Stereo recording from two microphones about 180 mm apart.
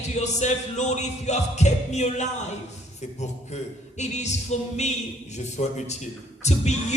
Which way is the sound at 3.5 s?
40° left (ahead or behind).